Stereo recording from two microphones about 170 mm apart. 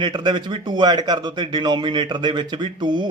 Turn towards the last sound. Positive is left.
turn(degrees=-25)  # may be behind; listen again after turning